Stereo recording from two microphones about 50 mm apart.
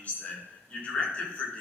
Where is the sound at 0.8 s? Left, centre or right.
Centre.